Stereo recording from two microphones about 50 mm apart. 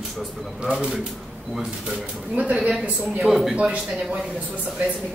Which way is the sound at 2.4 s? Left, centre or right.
Right.